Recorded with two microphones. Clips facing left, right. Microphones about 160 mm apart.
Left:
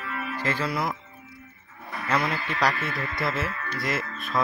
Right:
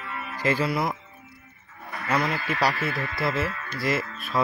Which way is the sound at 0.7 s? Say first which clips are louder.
Right 2 dB; centre (ahead or behind).